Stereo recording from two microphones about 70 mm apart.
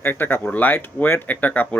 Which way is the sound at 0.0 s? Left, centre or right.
Left.